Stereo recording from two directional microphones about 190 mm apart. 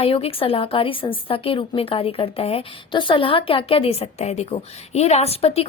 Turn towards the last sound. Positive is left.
turn(degrees=30)  # may be behind; listen again after turning